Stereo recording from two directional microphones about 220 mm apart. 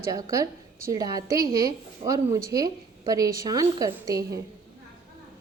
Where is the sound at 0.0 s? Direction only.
15° right (ahead or behind).